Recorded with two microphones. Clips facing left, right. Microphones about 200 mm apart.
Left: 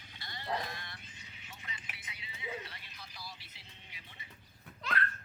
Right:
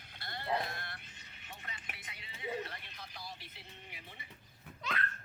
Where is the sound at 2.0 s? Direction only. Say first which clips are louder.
Right 3 dB; 55° right (ahead or behind).